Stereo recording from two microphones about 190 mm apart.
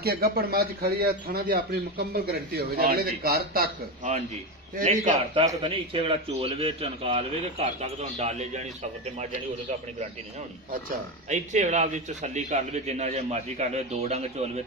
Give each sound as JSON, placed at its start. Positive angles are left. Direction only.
{"t": 0.0, "sound": "speech", "side_deg": -55}
{"t": 4.8, "sound": "a man's voice", "side_deg": -30}
{"t": 11.2, "sound": "a man's voice", "side_deg": -40}